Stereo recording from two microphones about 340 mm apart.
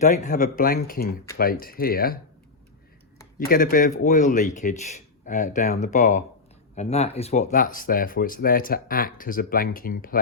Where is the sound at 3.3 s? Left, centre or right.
Left.